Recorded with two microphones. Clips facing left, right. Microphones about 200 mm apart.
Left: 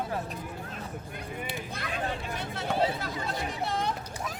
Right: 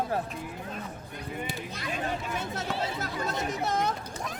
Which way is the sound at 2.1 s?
45° right (ahead or behind).